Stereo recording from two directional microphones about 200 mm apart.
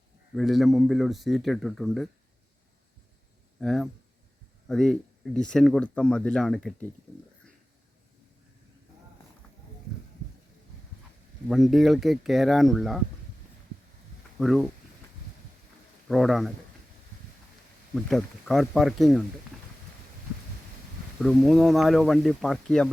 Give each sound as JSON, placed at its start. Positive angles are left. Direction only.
{"t": 0.3, "sound": "speech", "side_deg": 0}
{"t": 3.6, "sound": "speech", "side_deg": 0}
{"t": 11.4, "sound": "speech", "side_deg": 0}
{"t": 14.3, "sound": "speech", "side_deg": 0}
{"t": 16.0, "sound": "speech", "side_deg": 0}
{"t": 17.9, "sound": "speech", "side_deg": 0}
{"t": 21.2, "sound": "speech", "side_deg": 0}